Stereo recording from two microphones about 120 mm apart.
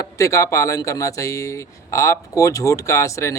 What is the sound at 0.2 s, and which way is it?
Speech, 25° left (ahead or behind).